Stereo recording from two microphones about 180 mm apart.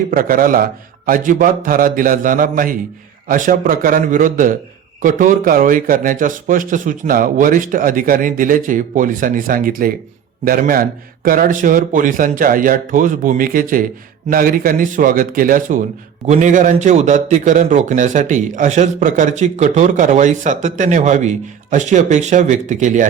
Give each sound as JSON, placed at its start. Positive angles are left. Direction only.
{"t": 0.1, "sound": "a man's voice", "side_deg": -50}